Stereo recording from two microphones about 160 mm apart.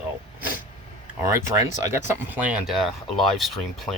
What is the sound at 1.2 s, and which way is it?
Speech, 20° right (ahead or behind).